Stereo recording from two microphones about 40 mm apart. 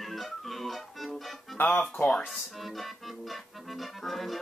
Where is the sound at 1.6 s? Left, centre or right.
Left.